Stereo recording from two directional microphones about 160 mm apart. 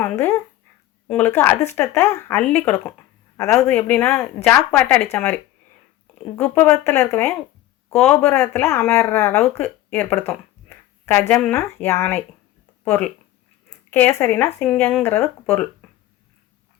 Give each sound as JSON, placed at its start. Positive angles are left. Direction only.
{"t": 0.0, "sound": "speech", "side_deg": 10}
{"t": 2.4, "sound": "speech", "side_deg": 5}
{"t": 6.4, "sound": "speech", "side_deg": 10}